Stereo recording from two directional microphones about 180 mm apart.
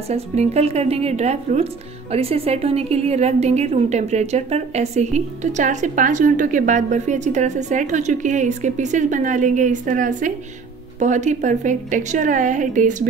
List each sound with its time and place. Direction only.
0.1 s a woman's voice: 35° right (ahead or behind)